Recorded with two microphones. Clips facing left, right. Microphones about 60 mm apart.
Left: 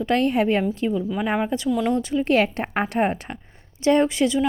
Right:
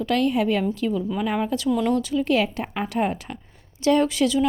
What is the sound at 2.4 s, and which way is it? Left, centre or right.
A woman's voice, left.